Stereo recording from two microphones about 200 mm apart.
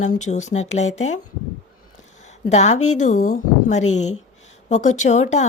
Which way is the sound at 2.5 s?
35° left (ahead or behind).